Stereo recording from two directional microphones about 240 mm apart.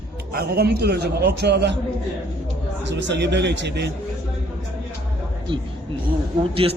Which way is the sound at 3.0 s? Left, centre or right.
Right.